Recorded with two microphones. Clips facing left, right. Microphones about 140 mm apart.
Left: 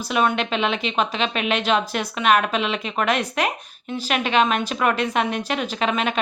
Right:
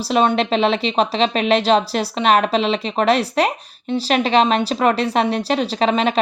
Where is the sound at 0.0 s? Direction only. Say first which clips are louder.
Right 5 dB; 30° right (ahead or behind).